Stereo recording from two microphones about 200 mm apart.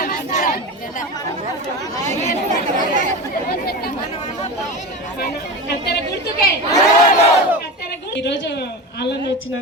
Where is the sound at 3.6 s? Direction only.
50° left (ahead or behind).